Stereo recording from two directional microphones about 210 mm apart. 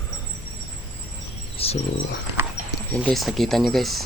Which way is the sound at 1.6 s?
25° left (ahead or behind).